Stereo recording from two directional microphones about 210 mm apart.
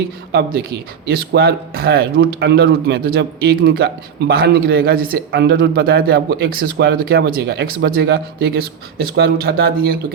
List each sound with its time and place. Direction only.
0.3 s a man's voice: 50° right (ahead or behind)